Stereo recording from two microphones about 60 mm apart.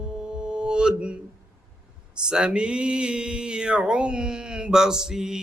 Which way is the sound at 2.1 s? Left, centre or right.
Centre.